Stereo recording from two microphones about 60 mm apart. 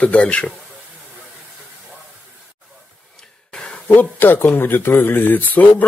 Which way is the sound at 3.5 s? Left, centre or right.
Centre.